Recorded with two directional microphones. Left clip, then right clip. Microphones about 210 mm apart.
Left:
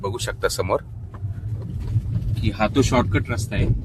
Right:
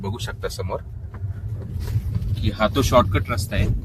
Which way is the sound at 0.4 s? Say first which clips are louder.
Left 7 dB; 50° left (ahead or behind).